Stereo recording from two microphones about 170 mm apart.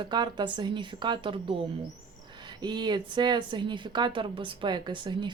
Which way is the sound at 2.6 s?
25° right (ahead or behind).